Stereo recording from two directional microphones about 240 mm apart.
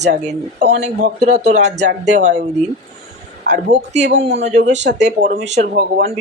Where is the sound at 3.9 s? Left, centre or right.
Right.